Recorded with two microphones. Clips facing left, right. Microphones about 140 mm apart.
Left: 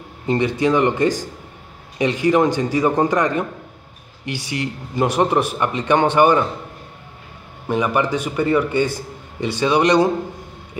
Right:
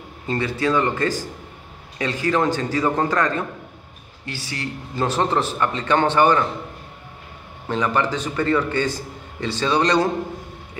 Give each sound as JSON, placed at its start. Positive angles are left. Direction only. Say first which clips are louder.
{"t": 0.3, "sound": "a man's voice", "louder": "left 4 dB", "side_deg": 20}
{"t": 7.6, "sound": "a man's voice", "louder": "left 2 dB", "side_deg": 10}